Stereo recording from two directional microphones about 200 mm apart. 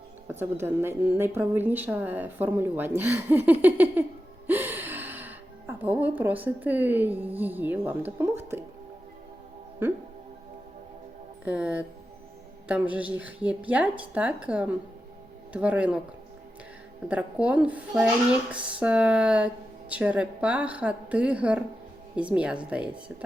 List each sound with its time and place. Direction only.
0.3 s a woman's voice: 10° right (ahead or behind)
9.8 s a woman's voice: 10° right (ahead or behind)
11.4 s a woman's voice: 5° right (ahead or behind)
17.1 s a woman's voice: 5° right (ahead or behind)
18.5 s a sound: 5° right (ahead or behind)
19.9 s a woman's voice: 5° right (ahead or behind)